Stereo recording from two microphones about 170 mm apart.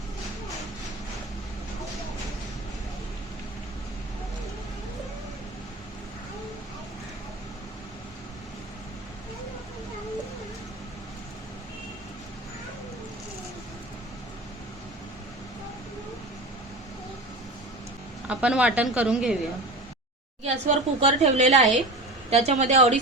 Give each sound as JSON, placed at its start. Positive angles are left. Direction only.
{"t": 18.3, "sound": "a woman's voice", "side_deg": -5}
{"t": 20.4, "sound": "a woman's voice", "side_deg": -40}